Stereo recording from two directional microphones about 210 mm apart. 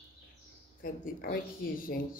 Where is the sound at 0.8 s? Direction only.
45° left (ahead or behind).